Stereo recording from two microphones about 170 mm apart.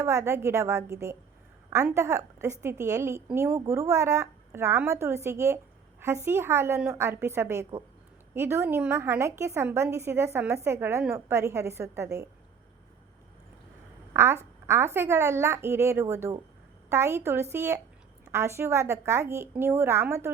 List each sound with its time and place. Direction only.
0.0 s a woman's voice: 15° right (ahead or behind)
14.1 s quack: 15° right (ahead or behind)
14.7 s a woman's voice: 15° right (ahead or behind)